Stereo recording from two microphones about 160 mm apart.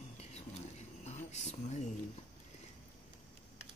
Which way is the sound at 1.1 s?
45° left (ahead or behind).